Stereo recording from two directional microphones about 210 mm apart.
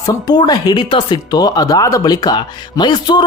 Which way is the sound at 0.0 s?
20° left (ahead or behind).